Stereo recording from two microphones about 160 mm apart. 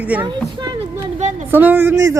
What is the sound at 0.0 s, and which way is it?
Speech, 10° right (ahead or behind).